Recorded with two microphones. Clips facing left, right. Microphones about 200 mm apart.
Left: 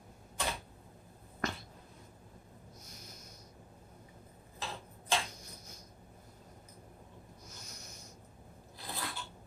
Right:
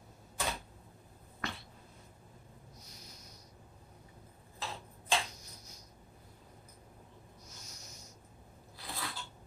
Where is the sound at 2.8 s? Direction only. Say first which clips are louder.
Left 2 dB; 50° left (ahead or behind).